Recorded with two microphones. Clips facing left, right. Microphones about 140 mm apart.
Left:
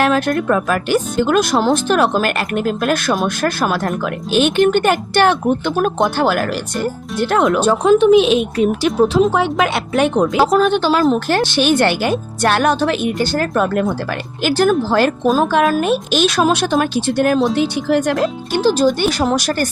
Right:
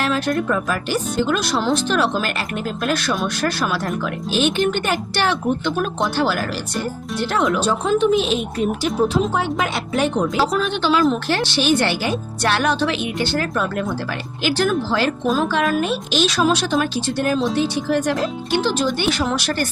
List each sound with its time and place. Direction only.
0.0 s speech: 55° left (ahead or behind); by 9.0 s 85° left
9.2 s speech: 75° left (ahead or behind); by 19.6 s 40° left (ahead or behind)